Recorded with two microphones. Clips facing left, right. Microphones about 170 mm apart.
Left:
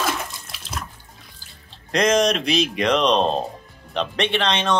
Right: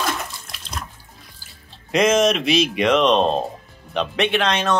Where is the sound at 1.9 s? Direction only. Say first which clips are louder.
Right 2 dB; 5° right (ahead or behind).